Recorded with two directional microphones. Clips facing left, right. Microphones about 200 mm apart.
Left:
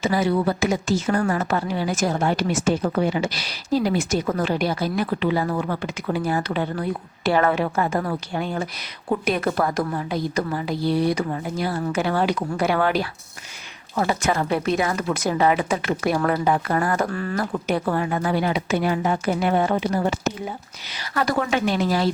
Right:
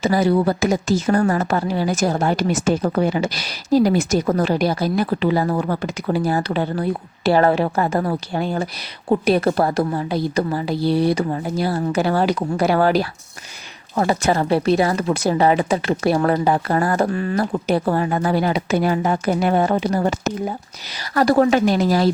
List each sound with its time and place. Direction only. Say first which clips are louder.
0.0 s a woman's voice: right 4 dB; 40° right (ahead or behind)
17.1 s a woman's voice: right 5 dB; 20° right (ahead or behind); by 22.1 s 40° right (ahead or behind)